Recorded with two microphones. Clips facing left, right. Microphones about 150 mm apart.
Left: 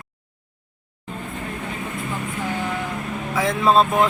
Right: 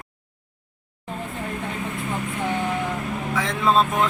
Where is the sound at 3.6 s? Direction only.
35° left (ahead or behind).